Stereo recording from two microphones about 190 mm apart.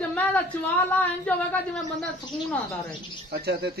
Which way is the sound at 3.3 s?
55° right (ahead or behind).